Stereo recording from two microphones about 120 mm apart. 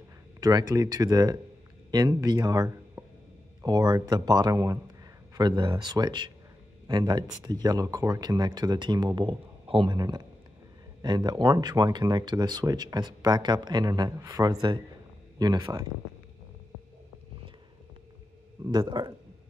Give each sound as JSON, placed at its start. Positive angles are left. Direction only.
{"t": 0.4, "sound": "speech", "side_deg": -30}
{"t": 3.0, "sound": "a sound", "side_deg": -15}
{"t": 3.6, "sound": "speech", "side_deg": -35}
{"t": 9.9, "sound": "speech", "side_deg": -30}
{"t": 18.7, "sound": "speech", "side_deg": -40}